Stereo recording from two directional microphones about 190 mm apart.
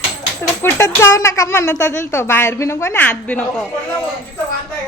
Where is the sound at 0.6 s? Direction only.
15° left (ahead or behind).